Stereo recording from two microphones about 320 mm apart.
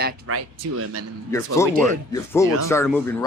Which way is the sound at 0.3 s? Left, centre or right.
Right.